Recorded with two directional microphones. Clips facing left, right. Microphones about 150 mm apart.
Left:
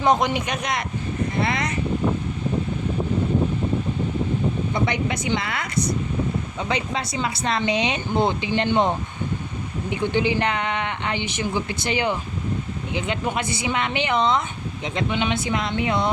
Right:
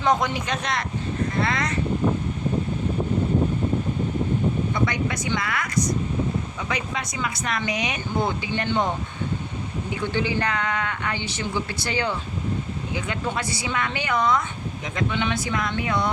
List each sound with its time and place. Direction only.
0.0 s speech: 20° left (ahead or behind)
4.7 s speech: 25° left (ahead or behind)
9.9 s speech: 20° left (ahead or behind)